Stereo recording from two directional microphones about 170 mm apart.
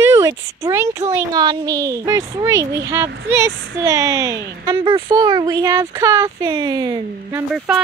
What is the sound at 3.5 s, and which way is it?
Speech, 90° right.